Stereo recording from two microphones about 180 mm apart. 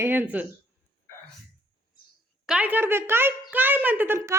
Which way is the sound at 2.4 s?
5° right (ahead or behind).